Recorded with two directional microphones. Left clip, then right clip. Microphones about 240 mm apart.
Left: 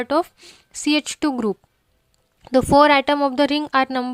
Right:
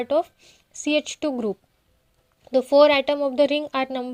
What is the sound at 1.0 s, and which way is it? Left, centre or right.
Speech, left.